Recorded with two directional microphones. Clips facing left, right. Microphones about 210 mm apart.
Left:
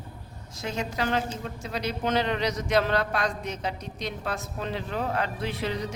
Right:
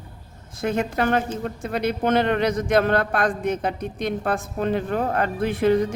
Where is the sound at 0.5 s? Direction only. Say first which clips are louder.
Right 7 dB; 55° right (ahead or behind).